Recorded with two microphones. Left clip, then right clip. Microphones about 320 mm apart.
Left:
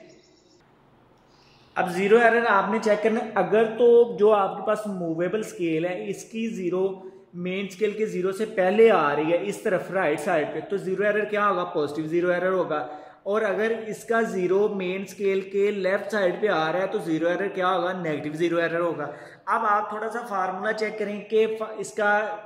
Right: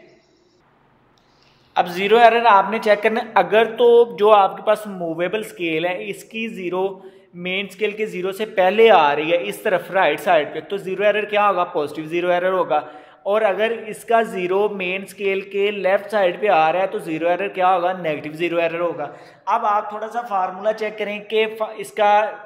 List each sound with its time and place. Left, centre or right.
2.0 s speech: centre
7.8 s speech: centre